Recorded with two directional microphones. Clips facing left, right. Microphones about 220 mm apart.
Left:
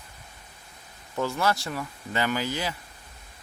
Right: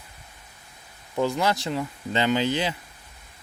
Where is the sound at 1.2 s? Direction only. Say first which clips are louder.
Right 3 dB; 20° right (ahead or behind).